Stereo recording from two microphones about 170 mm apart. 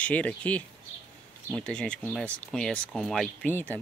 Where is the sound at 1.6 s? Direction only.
5° left (ahead or behind).